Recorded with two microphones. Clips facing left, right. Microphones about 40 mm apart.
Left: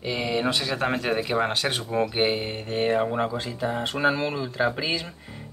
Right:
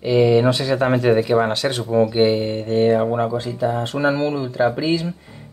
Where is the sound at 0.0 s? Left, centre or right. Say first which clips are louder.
Right 11 dB; centre; by 5.0 s left.